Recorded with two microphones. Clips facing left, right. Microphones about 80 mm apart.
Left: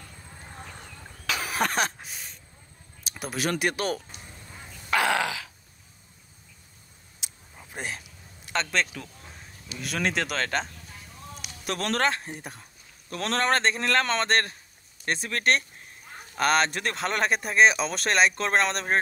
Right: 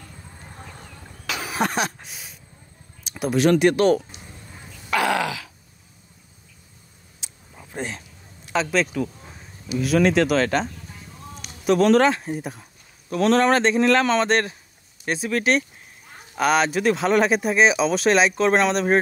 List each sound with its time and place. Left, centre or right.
1.2 s cough: right
2.0 s speech: centre
4.9 s a sound: left
7.7 s speech: centre
8.5 s speech: centre